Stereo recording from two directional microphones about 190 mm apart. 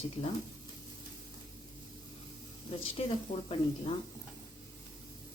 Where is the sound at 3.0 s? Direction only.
30° left (ahead or behind).